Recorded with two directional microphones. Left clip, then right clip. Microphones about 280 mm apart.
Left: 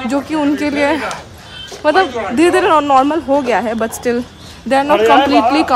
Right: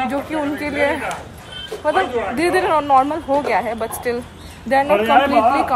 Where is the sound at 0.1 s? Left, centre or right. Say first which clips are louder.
Left 6 dB; centre.